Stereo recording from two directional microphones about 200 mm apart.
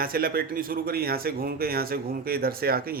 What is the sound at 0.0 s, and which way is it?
Speech, 45° right (ahead or behind).